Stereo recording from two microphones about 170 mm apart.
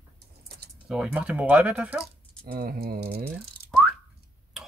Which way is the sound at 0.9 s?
5° right (ahead or behind).